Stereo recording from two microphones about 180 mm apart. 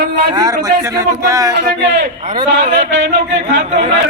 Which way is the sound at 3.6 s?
45° right (ahead or behind).